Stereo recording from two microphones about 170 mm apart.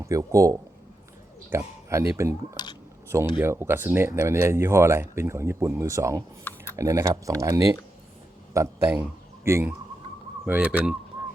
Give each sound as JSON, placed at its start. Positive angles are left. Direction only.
{"t": 0.0, "sound": "a man's voice", "side_deg": -20}
{"t": 2.6, "sound": "speech", "side_deg": 25}
{"t": 3.3, "sound": "a man's voice", "side_deg": -15}